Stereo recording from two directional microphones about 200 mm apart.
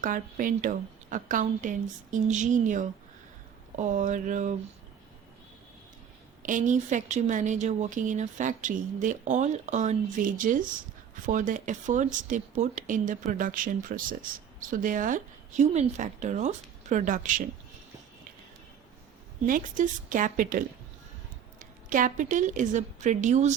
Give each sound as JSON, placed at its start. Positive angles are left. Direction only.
{"t": 0.0, "sound": "speech", "side_deg": -40}
{"t": 6.4, "sound": "speech", "side_deg": -40}
{"t": 19.5, "sound": "a woman's voice", "side_deg": -40}